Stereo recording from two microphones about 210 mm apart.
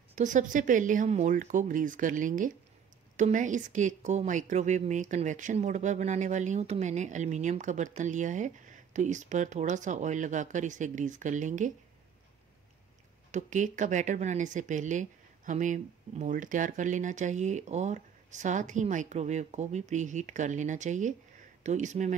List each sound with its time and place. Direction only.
0.1 s a woman's voice: 35° right (ahead or behind)
13.3 s a woman's voice: 35° right (ahead or behind)